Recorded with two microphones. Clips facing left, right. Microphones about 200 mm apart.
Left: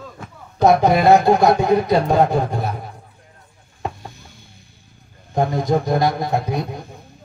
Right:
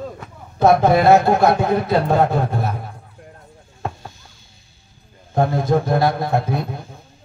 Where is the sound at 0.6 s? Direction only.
15° left (ahead or behind).